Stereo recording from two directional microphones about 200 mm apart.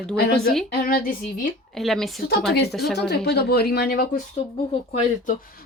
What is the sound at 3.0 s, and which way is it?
Speech, 55° left (ahead or behind).